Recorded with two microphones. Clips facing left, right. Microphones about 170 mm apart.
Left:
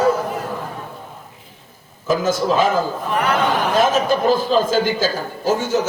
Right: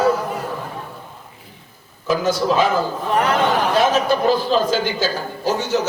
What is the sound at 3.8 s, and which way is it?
A man's voice, 45° left (ahead or behind).